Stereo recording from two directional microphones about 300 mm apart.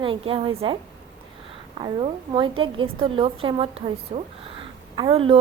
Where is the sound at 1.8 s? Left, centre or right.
Centre.